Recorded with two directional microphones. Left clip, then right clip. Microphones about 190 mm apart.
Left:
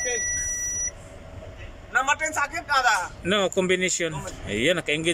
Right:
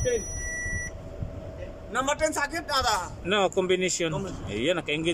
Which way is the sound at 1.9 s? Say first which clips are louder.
Left 3 dB; 30° right (ahead or behind).